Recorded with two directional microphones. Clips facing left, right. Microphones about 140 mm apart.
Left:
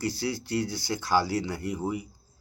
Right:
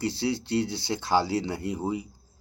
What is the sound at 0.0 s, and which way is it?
Speech, 25° right (ahead or behind).